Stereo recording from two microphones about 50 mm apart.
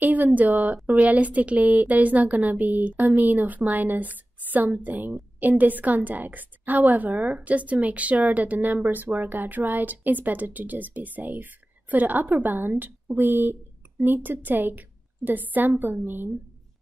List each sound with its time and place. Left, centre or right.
0.0 s a woman's voice: right